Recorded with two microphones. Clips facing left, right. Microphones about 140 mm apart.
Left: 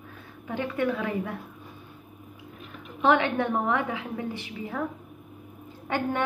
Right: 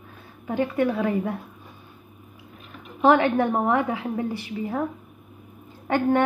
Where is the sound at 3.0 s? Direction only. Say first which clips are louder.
Right 4 dB; 40° right (ahead or behind).